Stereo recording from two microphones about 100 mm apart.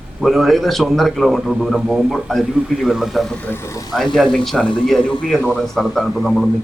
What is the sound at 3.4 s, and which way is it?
Speech, 25° left (ahead or behind).